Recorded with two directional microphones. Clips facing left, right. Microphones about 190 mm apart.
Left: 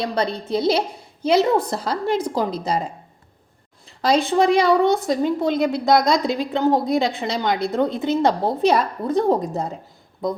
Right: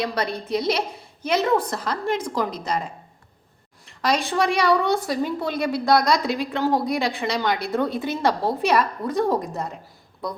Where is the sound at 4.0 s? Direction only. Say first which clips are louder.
Left 5 dB; 25° left (ahead or behind).